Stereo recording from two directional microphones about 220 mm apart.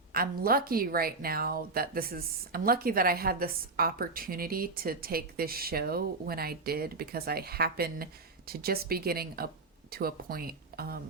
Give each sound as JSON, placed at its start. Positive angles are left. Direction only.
{"t": 0.1, "sound": "speech", "side_deg": -40}